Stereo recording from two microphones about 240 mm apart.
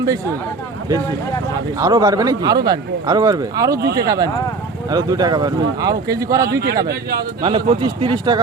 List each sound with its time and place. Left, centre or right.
1.8 s speech: centre
3.8 s speech: right
4.0 s speech: centre
6.5 s speech: right
7.4 s speech: right